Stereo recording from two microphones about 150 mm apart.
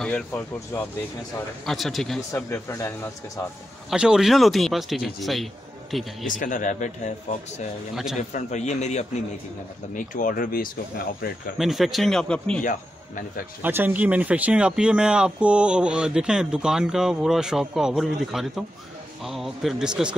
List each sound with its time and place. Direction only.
0.0 s speech: 10° left (ahead or behind)
1.7 s speech: centre (ahead or behind)
2.3 s speech: 20° left (ahead or behind)
3.9 s speech: 5° right (ahead or behind)
6.2 s speech: 60° left (ahead or behind)
7.9 s speech: 5° right (ahead or behind)
8.2 s a man's voice: 50° left (ahead or behind)
9.9 s speech: 65° left (ahead or behind)
11.5 s speech: centre (ahead or behind)
13.6 s speech: 15° right (ahead or behind)